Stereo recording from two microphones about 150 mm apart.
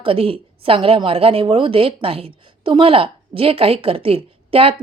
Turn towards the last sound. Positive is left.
turn(degrees=-40)  # may be behind; listen again after turning